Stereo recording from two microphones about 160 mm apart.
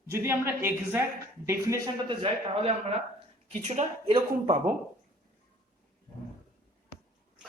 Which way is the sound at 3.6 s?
45° right (ahead or behind).